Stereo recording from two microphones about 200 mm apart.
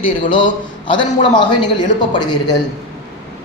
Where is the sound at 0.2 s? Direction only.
25° left (ahead or behind).